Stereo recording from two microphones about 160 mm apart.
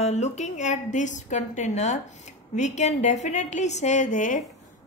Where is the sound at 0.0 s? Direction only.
45° left (ahead or behind).